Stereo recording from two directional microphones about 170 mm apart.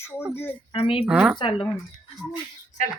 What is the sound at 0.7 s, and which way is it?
Speech, 35° left (ahead or behind).